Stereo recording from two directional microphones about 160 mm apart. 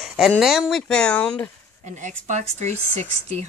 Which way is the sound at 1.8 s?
50° right (ahead or behind).